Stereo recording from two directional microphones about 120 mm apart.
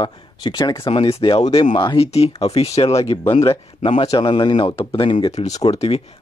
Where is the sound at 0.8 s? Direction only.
50° left (ahead or behind).